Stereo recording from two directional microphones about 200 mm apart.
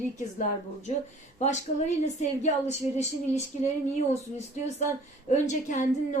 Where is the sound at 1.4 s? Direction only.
35° left (ahead or behind).